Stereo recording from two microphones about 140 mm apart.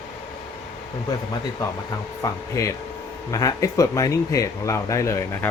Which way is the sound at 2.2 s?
20° left (ahead or behind).